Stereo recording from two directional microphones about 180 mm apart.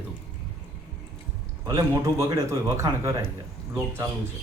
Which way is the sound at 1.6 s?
15° right (ahead or behind).